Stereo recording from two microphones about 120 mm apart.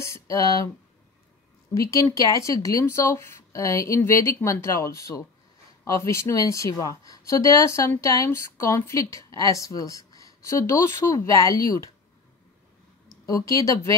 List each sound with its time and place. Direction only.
0.0 s speech: 25° left (ahead or behind)
1.7 s speech: 25° left (ahead or behind)
13.2 s speech: 30° left (ahead or behind)